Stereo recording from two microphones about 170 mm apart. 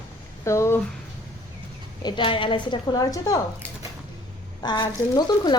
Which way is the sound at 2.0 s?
30° left (ahead or behind).